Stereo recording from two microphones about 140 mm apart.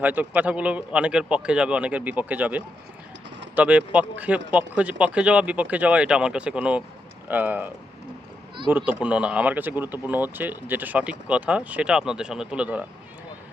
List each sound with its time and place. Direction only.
0.0 s speech: 10° right (ahead or behind)
8.7 s speech: 10° right (ahead or behind)